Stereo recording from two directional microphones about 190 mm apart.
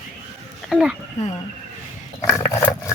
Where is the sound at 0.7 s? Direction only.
5° right (ahead or behind).